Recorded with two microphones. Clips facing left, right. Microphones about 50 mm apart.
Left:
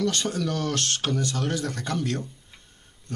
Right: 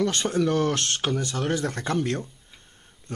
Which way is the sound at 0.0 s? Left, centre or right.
Right.